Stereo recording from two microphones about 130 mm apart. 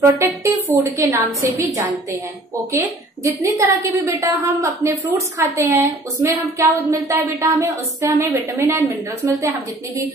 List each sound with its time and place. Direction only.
0.0 s speech: 20° right (ahead or behind)
3.4 s speech: 20° right (ahead or behind)